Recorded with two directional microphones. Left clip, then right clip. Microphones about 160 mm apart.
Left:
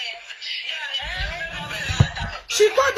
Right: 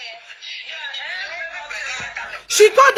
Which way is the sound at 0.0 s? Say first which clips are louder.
Left 3 dB; 50° left (ahead or behind).